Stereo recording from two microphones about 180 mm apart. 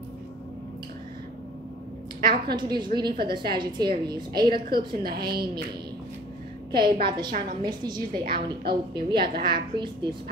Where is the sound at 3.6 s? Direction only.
25° right (ahead or behind).